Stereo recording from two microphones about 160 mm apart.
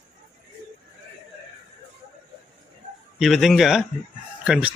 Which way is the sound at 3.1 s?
Centre (ahead or behind).